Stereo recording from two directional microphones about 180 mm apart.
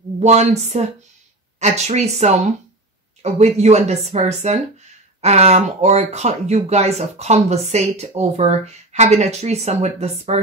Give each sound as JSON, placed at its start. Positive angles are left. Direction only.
{"t": 0.2, "sound": "speech", "side_deg": -40}